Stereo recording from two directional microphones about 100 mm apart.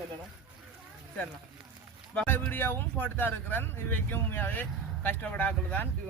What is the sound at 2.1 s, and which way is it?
Speech, 15° left (ahead or behind).